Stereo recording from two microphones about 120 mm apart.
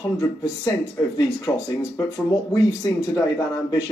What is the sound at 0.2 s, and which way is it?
Speech, 25° left (ahead or behind).